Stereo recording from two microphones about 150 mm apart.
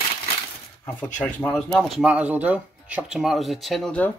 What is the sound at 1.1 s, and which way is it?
Speech, 10° left (ahead or behind).